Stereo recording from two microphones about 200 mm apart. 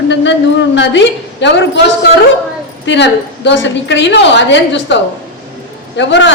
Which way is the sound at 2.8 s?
65° left (ahead or behind).